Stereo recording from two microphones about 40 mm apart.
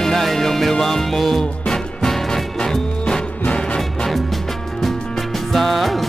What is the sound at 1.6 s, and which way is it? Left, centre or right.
Music, centre.